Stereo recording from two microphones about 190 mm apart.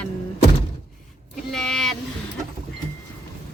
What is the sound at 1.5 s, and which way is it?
Speech, centre (ahead or behind).